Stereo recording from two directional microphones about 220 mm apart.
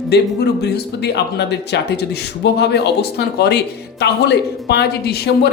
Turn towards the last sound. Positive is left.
turn(degrees=45)  # may be behind; listen again after turning